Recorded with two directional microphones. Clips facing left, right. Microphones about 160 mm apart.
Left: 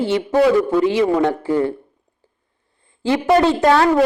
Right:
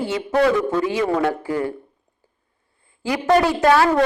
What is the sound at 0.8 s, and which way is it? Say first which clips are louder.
Speech: left 5 dB; 25° left (ahead or behind).